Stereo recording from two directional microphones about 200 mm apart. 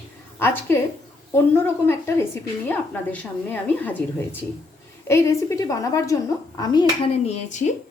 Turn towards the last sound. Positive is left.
turn(degrees=35)  # may be behind; listen again after turning